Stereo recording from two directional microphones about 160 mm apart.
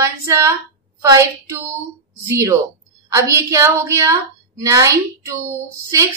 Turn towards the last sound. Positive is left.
turn(degrees=-20)  # may be behind; listen again after turning